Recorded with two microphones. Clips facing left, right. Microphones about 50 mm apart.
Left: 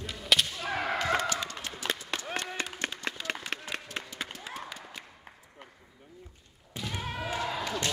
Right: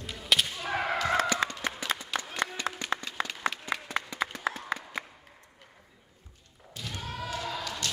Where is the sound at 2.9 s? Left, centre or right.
Right.